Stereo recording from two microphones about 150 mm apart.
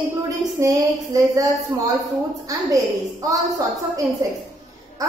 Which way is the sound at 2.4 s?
20° right (ahead or behind).